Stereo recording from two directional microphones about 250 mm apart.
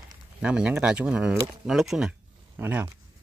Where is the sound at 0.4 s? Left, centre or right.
Centre.